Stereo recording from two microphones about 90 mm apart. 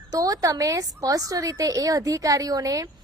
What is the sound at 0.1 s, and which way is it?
A woman's voice, 40° right (ahead or behind).